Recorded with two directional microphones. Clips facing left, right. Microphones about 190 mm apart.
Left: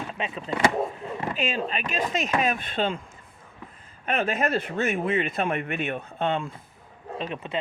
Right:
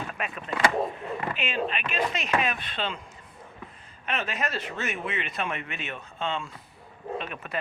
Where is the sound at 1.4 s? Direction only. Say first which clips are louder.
Left 2 dB; 40° left (ahead or behind).